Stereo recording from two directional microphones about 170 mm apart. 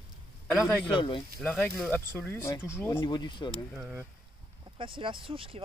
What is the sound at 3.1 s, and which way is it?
Speech, 25° left (ahead or behind).